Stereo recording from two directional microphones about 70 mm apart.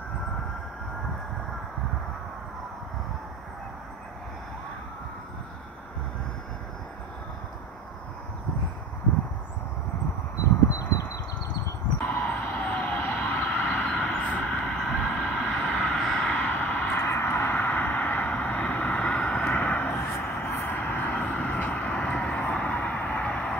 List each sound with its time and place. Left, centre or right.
12.0 s vehicle: left; by 16.3 s centre
16.3 s vehicle: centre